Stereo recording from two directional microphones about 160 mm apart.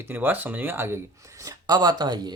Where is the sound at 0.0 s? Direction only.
15° right (ahead or behind).